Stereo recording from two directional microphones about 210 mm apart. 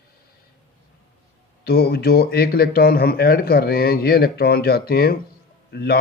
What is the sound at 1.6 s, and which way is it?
Speech, 50° left (ahead or behind).